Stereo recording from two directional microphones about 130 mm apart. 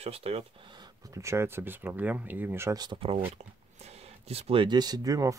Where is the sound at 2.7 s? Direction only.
35° right (ahead or behind).